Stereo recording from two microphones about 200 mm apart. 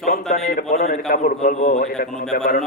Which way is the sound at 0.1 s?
40° left (ahead or behind).